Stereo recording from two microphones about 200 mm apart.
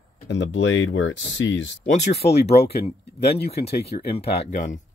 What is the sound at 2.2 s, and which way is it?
Speech, 30° left (ahead or behind).